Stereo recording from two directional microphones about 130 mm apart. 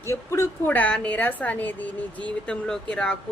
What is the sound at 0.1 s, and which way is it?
A woman's voice, 20° left (ahead or behind).